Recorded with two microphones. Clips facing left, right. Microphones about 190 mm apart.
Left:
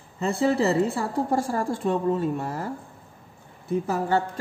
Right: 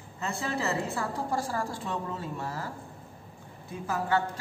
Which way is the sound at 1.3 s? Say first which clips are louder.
Left 6 dB; 55° left (ahead or behind).